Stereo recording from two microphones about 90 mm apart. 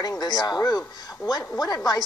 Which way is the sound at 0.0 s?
50° left (ahead or behind).